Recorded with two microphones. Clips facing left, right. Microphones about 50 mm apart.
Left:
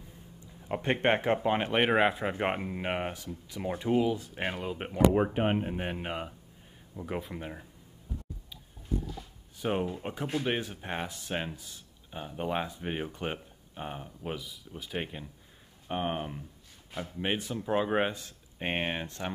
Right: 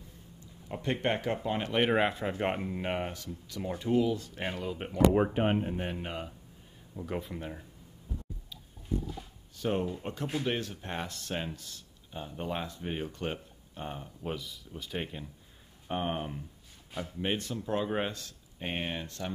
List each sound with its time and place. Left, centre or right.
0.7 s speech: left
1.9 s speech: centre
9.6 s speech: centre
17.0 s speech: centre